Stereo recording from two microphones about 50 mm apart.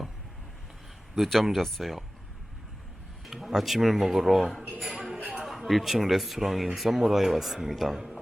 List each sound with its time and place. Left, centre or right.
1.1 s speech: centre
3.2 s speech: centre
4.8 s music: centre
5.3 s speech: centre